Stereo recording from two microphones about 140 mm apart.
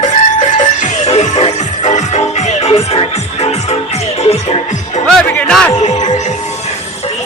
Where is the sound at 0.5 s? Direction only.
60° left (ahead or behind).